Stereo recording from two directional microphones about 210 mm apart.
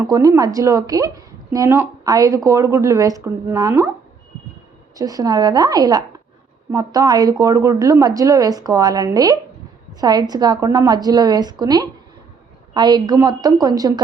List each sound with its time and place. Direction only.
0.0 s a woman's voice: 15° right (ahead or behind)
4.9 s a woman's voice: 15° right (ahead or behind)